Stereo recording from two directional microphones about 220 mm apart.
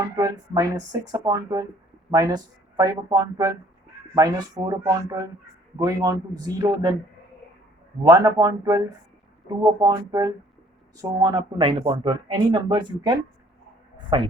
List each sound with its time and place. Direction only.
0.2 s speech: 15° right (ahead or behind)
8.0 s speech: 15° right (ahead or behind)